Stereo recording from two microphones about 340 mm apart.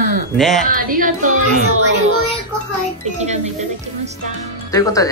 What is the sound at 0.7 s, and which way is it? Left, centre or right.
Speech, right.